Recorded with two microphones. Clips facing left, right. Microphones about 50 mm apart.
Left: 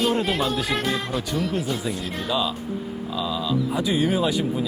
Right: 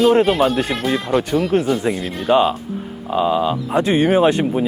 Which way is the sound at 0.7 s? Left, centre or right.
Centre.